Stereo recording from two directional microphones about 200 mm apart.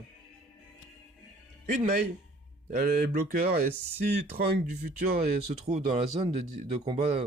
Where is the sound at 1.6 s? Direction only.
45° right (ahead or behind).